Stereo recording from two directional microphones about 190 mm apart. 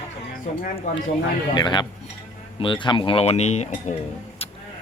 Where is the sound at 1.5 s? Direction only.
20° left (ahead or behind).